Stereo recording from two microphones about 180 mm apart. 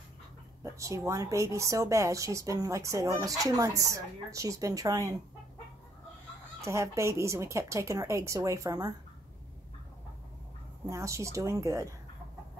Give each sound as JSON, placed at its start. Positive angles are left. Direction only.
{"t": 0.7, "sound": "speech", "side_deg": -15}
{"t": 6.6, "sound": "speech", "side_deg": -15}
{"t": 10.9, "sound": "speech", "side_deg": -15}